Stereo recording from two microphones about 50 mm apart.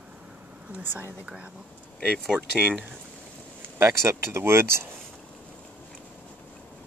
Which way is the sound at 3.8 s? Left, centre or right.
Right.